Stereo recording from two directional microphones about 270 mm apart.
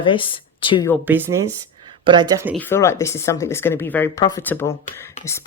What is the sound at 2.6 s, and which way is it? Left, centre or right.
Speech, centre.